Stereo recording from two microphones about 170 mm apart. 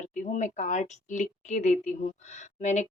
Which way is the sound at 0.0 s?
45° left (ahead or behind).